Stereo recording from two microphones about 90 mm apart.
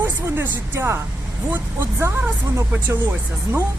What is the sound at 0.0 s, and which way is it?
Speech, 20° right (ahead or behind).